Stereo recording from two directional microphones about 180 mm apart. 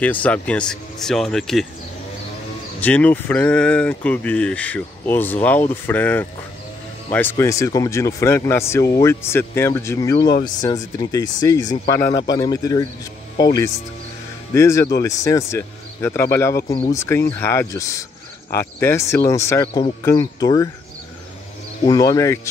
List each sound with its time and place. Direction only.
0.0 s speech: 10° left (ahead or behind)
2.8 s speech: 10° left (ahead or behind)
14.5 s speech: 15° left (ahead or behind)
21.8 s speech: 20° left (ahead or behind)